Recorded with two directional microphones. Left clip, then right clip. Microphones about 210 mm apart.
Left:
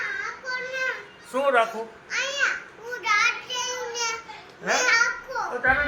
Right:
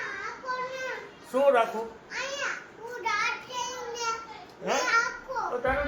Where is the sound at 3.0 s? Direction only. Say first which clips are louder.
Left 6 dB; 30° right (ahead or behind).